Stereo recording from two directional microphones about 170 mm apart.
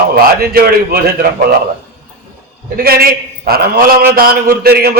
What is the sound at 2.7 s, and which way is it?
A man's voice, 60° right (ahead or behind).